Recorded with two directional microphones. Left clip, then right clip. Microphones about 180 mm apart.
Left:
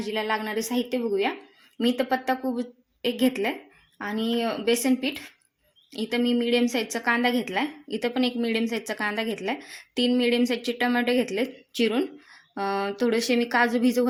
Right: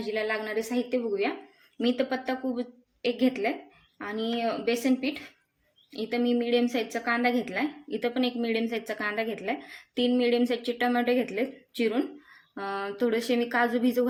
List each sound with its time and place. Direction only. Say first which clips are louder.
0.1 s a woman's voice: left 2 dB; 45° left (ahead or behind)